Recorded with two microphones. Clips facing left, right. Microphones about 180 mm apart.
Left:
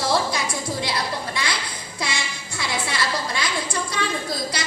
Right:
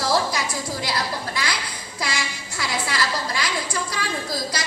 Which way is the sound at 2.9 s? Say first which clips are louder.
Even; 25° left (ahead or behind).